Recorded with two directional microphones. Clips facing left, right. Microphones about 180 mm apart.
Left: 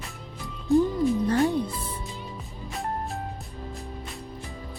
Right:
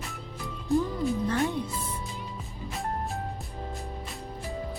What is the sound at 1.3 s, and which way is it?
Music, 35° left (ahead or behind).